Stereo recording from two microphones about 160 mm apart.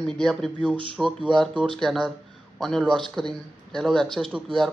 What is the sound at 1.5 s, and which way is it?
Speech, 30° right (ahead or behind).